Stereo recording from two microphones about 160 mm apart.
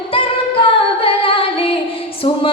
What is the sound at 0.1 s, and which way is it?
Female singing, 35° left (ahead or behind).